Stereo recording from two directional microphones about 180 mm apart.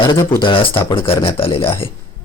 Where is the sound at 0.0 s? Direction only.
25° left (ahead or behind).